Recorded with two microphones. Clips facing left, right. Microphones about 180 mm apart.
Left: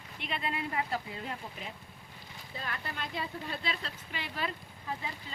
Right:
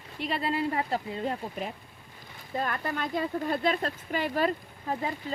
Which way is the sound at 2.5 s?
50° right (ahead or behind).